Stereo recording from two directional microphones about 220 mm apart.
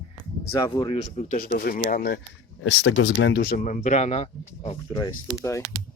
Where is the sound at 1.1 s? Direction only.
35° left (ahead or behind).